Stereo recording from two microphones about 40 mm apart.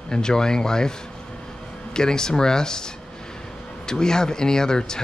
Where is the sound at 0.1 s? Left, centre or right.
Centre.